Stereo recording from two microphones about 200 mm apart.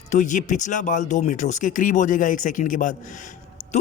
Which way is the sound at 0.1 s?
40° left (ahead or behind).